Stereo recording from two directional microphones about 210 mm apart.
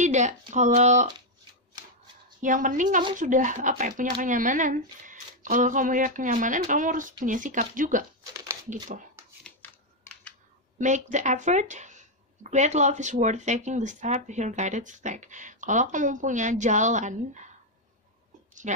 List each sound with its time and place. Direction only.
0.0 s speech: 35° right (ahead or behind)
2.4 s speech: 40° right (ahead or behind)
9.4 s scissors: 5° left (ahead or behind)
10.8 s speech: 35° right (ahead or behind)
18.5 s a sound: 35° right (ahead or behind)